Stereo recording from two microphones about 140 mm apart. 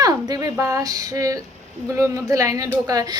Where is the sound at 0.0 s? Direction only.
25° right (ahead or behind).